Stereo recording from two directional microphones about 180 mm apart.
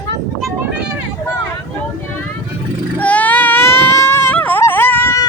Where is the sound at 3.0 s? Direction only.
10° left (ahead or behind).